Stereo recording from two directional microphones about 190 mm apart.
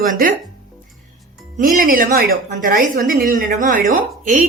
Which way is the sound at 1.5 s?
45° right (ahead or behind).